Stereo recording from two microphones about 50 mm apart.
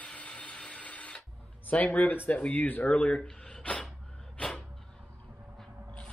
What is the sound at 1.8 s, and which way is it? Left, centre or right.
Speech, left.